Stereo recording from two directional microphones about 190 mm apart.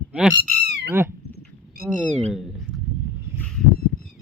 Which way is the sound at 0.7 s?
60° right (ahead or behind).